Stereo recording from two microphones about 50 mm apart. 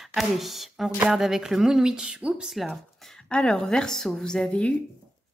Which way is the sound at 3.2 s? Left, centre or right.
Centre.